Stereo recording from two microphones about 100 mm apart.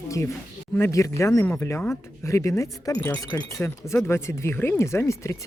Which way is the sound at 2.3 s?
30° left (ahead or behind).